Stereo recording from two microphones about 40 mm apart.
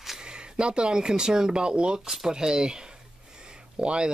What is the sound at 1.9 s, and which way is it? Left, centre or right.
Speech, centre.